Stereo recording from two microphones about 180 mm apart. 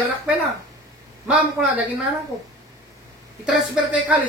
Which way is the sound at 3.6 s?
5° right (ahead or behind).